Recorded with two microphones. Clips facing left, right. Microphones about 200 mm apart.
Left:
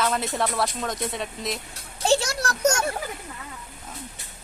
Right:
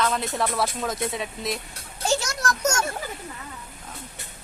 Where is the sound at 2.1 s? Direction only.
30° left (ahead or behind).